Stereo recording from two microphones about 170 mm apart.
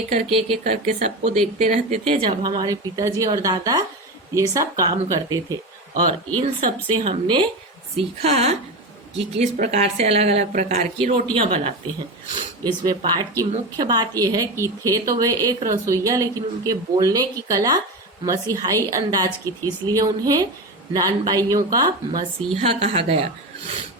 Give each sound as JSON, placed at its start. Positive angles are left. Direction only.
{"t": 0.1, "sound": "a woman's voice", "side_deg": -35}
{"t": 0.6, "sound": "speech", "side_deg": -50}
{"t": 6.4, "sound": "a woman's voice", "side_deg": -35}
{"t": 10.9, "sound": "a woman's voice", "side_deg": -35}
{"t": 12.6, "sound": "speech", "side_deg": -25}
{"t": 22.5, "sound": "a woman's voice", "side_deg": -35}